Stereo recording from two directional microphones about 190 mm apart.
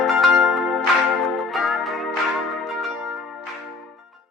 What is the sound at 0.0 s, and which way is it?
Music, centre (ahead or behind).